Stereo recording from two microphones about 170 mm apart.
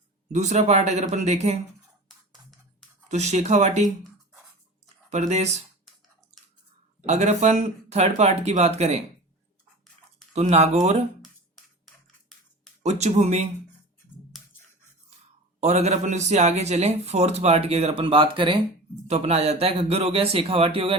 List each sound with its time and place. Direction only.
0.3 s a man's voice: 45° right (ahead or behind)
3.1 s speech: 40° right (ahead or behind)
5.0 s a man's voice: 40° right (ahead or behind)
7.0 s a man's voice: 40° right (ahead or behind)
10.3 s a man's voice: 40° right (ahead or behind)
12.8 s a man's voice: 40° right (ahead or behind)
15.6 s a man's voice: 40° right (ahead or behind)